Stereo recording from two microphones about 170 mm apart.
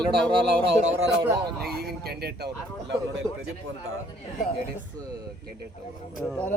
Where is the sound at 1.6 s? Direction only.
65° right (ahead or behind).